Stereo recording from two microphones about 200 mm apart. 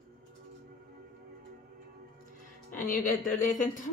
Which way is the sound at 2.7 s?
45° left (ahead or behind).